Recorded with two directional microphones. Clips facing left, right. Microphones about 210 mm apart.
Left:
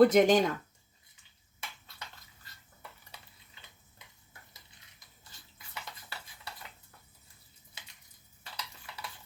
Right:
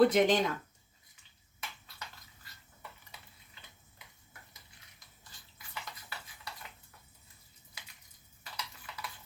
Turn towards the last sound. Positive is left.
turn(degrees=25)  # may be behind; listen again after turning